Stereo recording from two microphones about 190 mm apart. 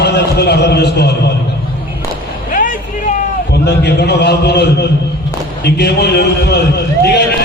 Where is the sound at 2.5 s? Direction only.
45° left (ahead or behind).